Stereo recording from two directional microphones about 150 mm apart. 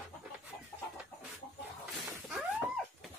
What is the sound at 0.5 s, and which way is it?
Chicken, 20° left (ahead or behind).